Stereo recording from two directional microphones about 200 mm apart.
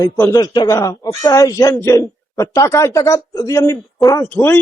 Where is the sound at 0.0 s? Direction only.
15° left (ahead or behind).